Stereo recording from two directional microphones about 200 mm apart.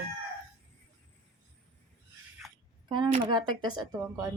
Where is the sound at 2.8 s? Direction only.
20° right (ahead or behind).